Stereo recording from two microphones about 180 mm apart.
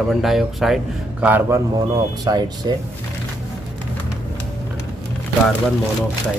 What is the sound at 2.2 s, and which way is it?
Speech, 25° right (ahead or behind).